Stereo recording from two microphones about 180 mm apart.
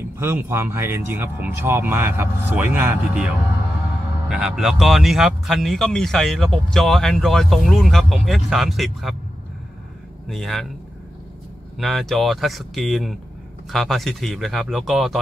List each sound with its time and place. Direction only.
0.2 s speech: 15° right (ahead or behind)
4.3 s speech: 5° right (ahead or behind)
10.2 s speech: centre (ahead or behind)
11.8 s speech: centre (ahead or behind)